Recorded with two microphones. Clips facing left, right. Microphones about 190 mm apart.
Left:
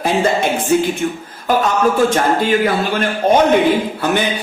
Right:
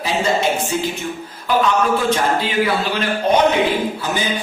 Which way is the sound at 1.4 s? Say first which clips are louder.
Left 2 dB; 45° left (ahead or behind).